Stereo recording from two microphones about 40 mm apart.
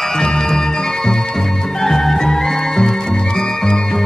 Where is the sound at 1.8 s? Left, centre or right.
Centre.